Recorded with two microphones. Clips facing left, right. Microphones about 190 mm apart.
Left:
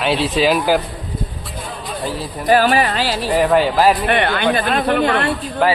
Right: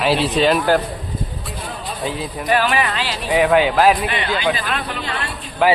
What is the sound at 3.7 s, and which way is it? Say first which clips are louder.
Speech: even; 10° left (ahead or behind).